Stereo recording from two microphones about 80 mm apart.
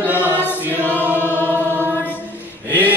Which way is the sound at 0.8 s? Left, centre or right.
Left.